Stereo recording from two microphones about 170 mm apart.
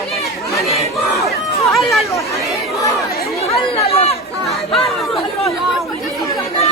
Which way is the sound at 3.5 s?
35° left (ahead or behind).